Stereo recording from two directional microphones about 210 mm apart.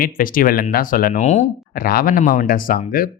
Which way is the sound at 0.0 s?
40° left (ahead or behind).